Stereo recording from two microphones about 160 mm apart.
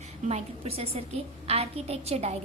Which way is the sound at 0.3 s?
40° right (ahead or behind).